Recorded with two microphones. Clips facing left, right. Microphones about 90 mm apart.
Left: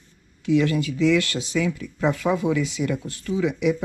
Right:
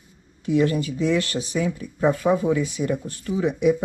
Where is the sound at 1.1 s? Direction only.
30° right (ahead or behind).